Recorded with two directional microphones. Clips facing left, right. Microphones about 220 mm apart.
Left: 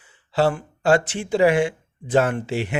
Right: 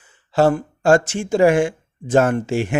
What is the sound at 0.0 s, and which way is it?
Speech, 45° right (ahead or behind).